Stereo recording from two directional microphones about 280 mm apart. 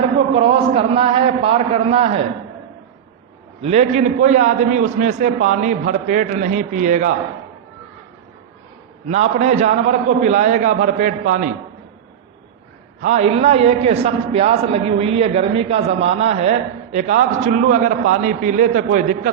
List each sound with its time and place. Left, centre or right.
0.3 s a man's voice: centre
3.6 s a man's voice: right
9.0 s a man's voice: right
13.0 s a man's voice: right